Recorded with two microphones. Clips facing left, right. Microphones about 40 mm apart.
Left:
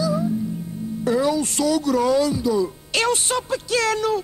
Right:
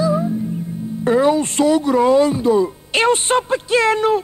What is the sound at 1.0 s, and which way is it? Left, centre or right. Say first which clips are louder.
Speech: right 5 dB; right.